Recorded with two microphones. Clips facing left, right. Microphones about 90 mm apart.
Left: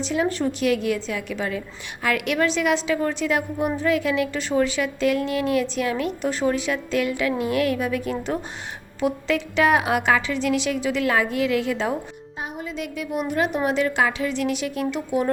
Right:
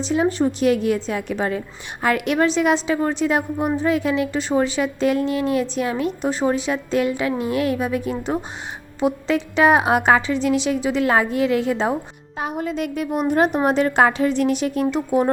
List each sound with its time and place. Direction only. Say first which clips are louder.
0.0 s a woman's voice: right 4 dB; 25° right (ahead or behind)
12.4 s a woman's voice: right 7 dB; 60° right (ahead or behind); by 15.3 s 35° right (ahead or behind)